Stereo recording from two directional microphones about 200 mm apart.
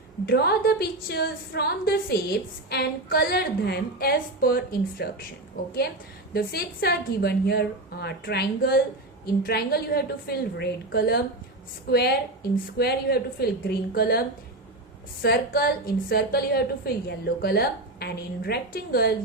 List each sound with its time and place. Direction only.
0.3 s a woman's voice: 50° left (ahead or behind)
6.3 s a woman's voice: 50° left (ahead or behind)